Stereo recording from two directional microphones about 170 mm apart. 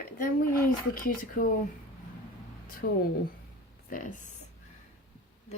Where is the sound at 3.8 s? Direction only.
50° left (ahead or behind).